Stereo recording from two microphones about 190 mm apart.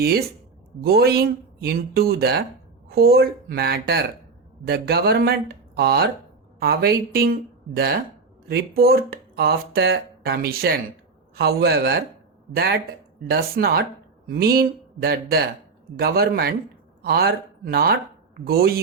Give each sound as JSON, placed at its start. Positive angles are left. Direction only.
{"t": 0.0, "sound": "speech", "side_deg": -55}